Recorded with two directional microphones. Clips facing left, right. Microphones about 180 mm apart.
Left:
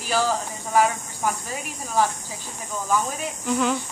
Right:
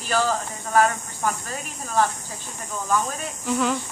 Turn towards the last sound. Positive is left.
turn(degrees=0)  # may be behind; listen again after turning